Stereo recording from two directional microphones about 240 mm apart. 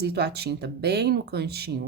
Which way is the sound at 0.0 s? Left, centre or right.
Right.